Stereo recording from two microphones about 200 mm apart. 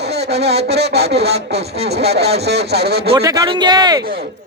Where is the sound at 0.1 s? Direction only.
55° right (ahead or behind).